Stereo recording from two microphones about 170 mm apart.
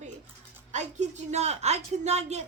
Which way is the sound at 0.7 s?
45° right (ahead or behind).